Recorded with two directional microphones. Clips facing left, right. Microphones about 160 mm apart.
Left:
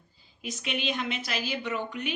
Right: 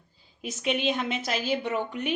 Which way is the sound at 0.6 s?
40° right (ahead or behind).